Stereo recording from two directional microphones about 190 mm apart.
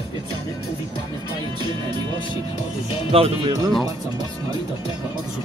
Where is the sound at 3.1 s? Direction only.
30° right (ahead or behind).